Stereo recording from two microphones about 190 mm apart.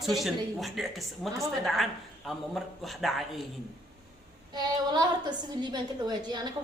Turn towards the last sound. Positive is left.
turn(degrees=-20)  # may be behind; listen again after turning